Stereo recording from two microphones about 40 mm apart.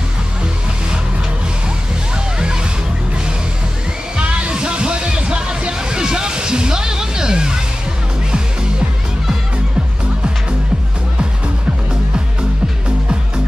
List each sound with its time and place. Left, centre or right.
2.3 s music: centre
4.2 s music: right